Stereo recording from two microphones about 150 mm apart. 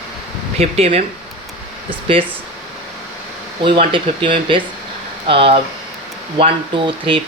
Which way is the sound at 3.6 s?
35° right (ahead or behind).